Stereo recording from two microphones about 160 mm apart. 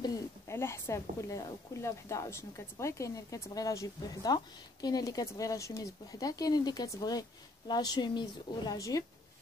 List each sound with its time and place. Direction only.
0.0 s speech: 20° left (ahead or behind)